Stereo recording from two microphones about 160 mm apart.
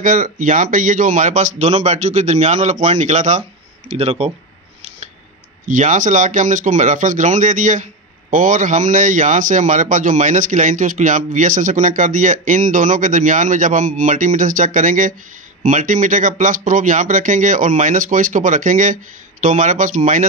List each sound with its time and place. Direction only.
0.0 s speech: 55° right (ahead or behind); by 4.3 s 40° right (ahead or behind)
5.7 s speech: 50° right (ahead or behind)